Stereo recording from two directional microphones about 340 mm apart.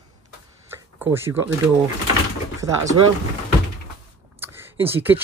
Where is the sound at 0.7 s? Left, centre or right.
Centre.